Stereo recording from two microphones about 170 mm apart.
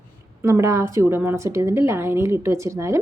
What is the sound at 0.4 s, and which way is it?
Speech, 15° right (ahead or behind).